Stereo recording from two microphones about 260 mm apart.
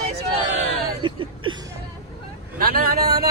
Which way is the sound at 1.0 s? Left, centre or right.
Centre.